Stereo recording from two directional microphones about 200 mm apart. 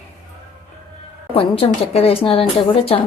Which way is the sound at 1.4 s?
30° left (ahead or behind).